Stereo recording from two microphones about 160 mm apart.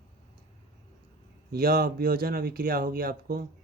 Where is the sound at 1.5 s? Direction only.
70° right (ahead or behind).